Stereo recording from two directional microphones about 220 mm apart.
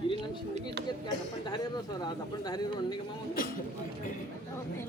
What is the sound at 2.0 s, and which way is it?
Speech, 20° left (ahead or behind).